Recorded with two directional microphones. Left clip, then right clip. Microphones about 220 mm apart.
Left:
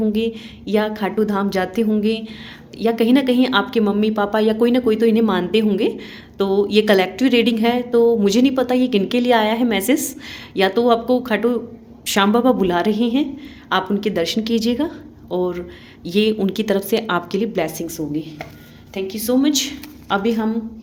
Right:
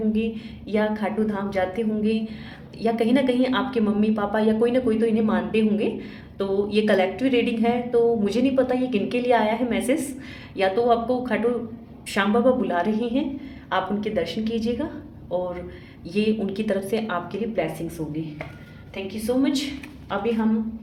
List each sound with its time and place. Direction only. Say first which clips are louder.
0.1 s a woman's voice: left 5 dB; 45° left (ahead or behind)
16.0 s a woman's voice: left 6 dB; 45° left (ahead or behind)